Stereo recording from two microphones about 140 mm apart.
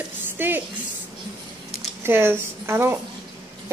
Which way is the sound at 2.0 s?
15° right (ahead or behind).